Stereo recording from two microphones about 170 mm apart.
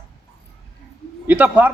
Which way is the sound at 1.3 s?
10° right (ahead or behind).